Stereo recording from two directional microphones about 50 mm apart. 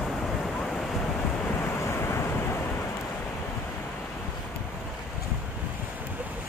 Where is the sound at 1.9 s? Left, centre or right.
Left.